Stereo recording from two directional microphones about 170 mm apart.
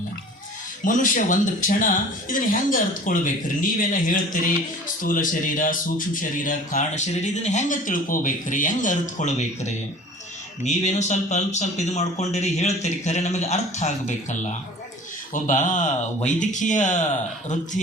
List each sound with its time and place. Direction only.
0.9 s speech: 50° left (ahead or behind)